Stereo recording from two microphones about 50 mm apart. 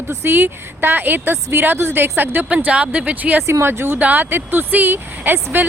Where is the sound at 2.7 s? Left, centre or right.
Right.